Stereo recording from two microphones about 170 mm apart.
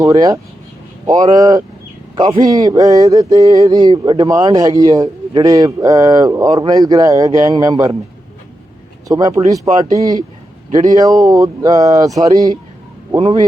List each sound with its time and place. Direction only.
0.0 s speech: 25° right (ahead or behind)
9.0 s speech: 20° right (ahead or behind)